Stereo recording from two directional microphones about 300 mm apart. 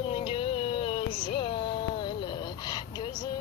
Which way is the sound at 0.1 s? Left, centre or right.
Centre.